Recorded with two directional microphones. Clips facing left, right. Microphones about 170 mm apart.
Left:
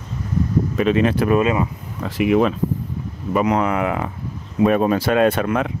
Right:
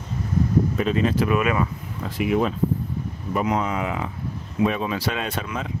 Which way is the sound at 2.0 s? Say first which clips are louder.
Left 5 dB; 85° left.